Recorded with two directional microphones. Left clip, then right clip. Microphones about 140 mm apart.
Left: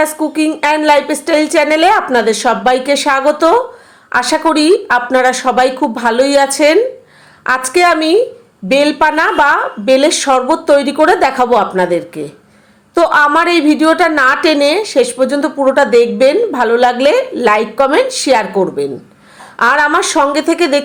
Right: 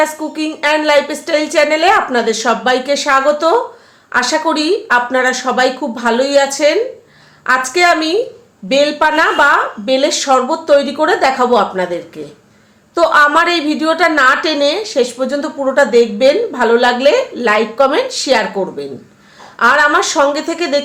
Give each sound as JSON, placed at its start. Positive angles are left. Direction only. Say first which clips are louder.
{"t": 0.0, "sound": "a woman's voice", "louder": "left 3 dB", "side_deg": 45}